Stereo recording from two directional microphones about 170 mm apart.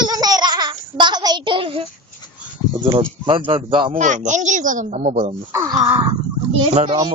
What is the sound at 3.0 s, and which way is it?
Speech, 30° right (ahead or behind).